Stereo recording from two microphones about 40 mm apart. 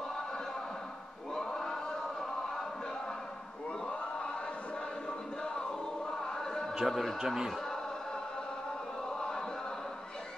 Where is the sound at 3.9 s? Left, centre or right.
Left.